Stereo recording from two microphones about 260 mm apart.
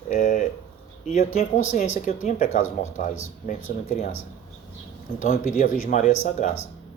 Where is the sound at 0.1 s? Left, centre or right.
Left.